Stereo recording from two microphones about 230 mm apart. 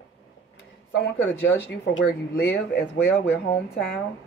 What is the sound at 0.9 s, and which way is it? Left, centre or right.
A woman's voice, left.